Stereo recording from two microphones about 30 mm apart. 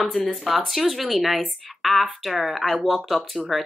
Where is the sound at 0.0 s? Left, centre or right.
Centre.